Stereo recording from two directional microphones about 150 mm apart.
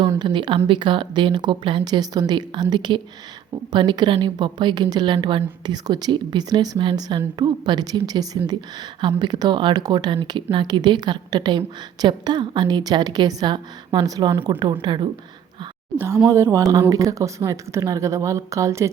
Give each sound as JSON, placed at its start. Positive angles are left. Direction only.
{"t": 0.2, "sound": "a woman's voice", "side_deg": -30}
{"t": 14.3, "sound": "a woman's voice", "side_deg": -15}
{"t": 14.6, "sound": "speech", "side_deg": -30}
{"t": 16.0, "sound": "a woman's voice", "side_deg": -15}